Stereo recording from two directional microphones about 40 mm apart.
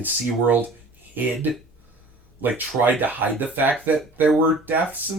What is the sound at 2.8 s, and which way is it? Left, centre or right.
Speech, right.